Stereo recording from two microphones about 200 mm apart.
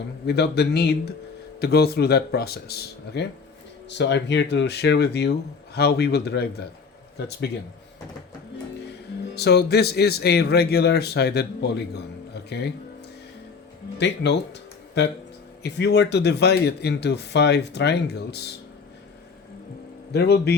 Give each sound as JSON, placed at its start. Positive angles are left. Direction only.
{"t": 0.3, "sound": "speech", "side_deg": 55}
{"t": 8.9, "sound": "speech", "side_deg": 55}
{"t": 14.0, "sound": "speech", "side_deg": 60}
{"t": 20.1, "sound": "speech", "side_deg": 55}